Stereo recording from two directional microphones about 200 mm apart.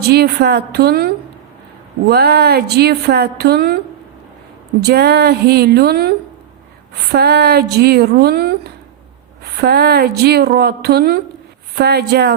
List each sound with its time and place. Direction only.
0.1 s a woman's voice: 50° right (ahead or behind)
4.8 s a woman's voice: 55° right (ahead or behind)
7.1 s a woman's voice: 55° right (ahead or behind)